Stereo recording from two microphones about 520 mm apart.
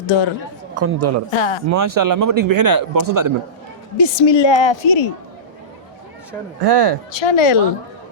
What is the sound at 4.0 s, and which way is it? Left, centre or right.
A woman's voice, left.